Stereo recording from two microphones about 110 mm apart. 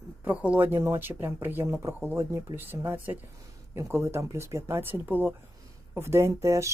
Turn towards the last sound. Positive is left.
turn(degrees=-25)  # may be behind; listen again after turning